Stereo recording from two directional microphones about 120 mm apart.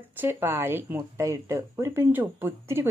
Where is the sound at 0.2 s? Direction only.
20° right (ahead or behind).